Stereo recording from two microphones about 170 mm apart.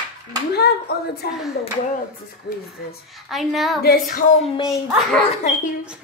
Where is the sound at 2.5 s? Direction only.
70° left (ahead or behind).